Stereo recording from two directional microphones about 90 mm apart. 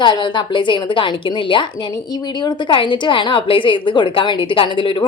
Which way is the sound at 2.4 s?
50° left (ahead or behind).